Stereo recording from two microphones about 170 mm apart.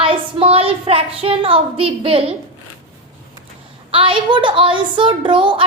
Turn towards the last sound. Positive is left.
turn(degrees=-30)  # may be behind; listen again after turning